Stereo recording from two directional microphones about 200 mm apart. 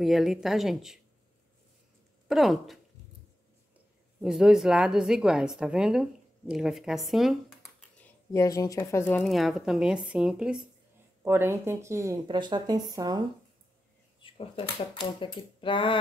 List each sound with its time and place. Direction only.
0.0 s speech: centre (ahead or behind)
2.2 s speech: centre (ahead or behind)
4.2 s speech: 5° right (ahead or behind)
8.0 s speech: 15° left (ahead or behind); by 13.2 s 20° right (ahead or behind)
14.2 s speech: 30° left (ahead or behind)